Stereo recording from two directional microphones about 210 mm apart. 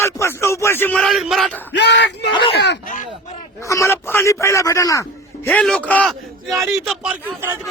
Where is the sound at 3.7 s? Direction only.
15° left (ahead or behind).